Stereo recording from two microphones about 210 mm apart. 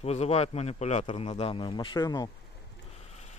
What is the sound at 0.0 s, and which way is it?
A man's voice, 30° left (ahead or behind).